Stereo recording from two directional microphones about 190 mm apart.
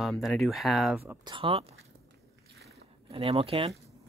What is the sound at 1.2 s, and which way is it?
Speech, 25° right (ahead or behind).